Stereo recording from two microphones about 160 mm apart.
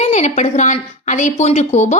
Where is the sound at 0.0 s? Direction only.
45° left (ahead or behind).